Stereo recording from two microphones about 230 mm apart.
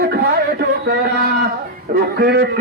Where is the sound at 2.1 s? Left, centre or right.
Right.